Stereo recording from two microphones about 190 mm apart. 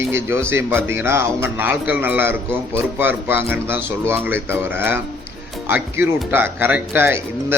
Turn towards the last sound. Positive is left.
turn(degrees=-10)  # may be behind; listen again after turning